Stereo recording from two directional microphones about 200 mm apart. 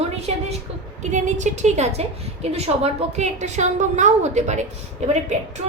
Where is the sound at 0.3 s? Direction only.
30° right (ahead or behind).